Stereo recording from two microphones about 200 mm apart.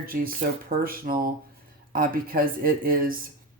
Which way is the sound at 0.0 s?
45° right (ahead or behind).